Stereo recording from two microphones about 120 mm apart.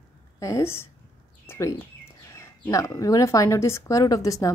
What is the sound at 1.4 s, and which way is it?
Bird, 20° left (ahead or behind).